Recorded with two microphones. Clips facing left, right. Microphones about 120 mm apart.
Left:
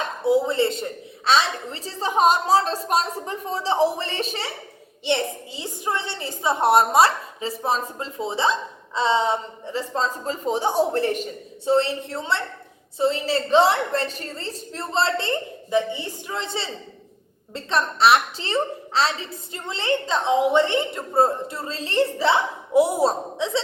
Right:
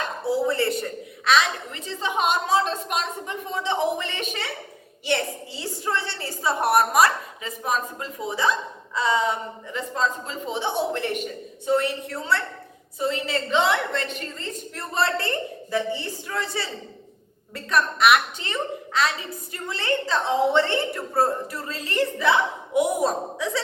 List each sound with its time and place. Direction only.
0.3 s a woman's voice: 20° left (ahead or behind)